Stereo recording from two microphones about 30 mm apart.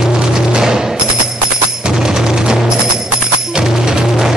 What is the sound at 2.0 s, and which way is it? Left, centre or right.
Music, right.